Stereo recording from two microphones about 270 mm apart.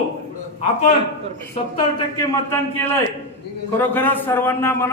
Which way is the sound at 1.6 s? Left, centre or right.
Left.